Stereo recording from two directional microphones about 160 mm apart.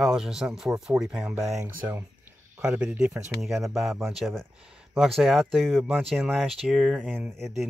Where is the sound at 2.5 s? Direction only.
5° right (ahead or behind).